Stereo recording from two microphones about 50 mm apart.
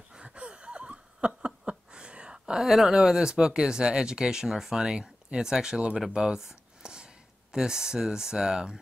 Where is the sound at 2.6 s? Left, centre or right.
Centre.